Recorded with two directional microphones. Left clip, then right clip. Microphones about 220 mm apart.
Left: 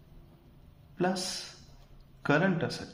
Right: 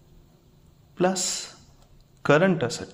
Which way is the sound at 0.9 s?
40° right (ahead or behind).